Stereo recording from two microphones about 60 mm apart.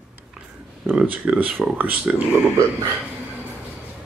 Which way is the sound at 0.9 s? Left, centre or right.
Right.